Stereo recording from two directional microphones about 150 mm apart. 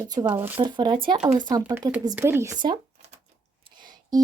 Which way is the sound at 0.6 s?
30° right (ahead or behind).